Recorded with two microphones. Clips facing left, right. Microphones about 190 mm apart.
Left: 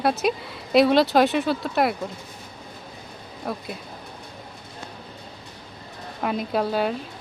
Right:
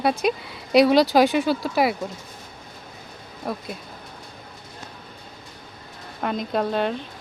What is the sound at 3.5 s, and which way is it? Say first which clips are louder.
Speech: right 1 dB; centre (ahead or behind).